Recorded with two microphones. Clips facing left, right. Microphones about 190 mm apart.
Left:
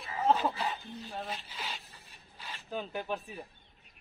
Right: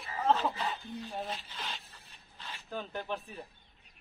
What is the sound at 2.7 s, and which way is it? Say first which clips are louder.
Speech: left 2 dB; 10° left (ahead or behind).